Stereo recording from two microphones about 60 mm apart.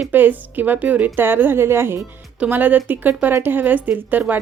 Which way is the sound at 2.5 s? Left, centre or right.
Right.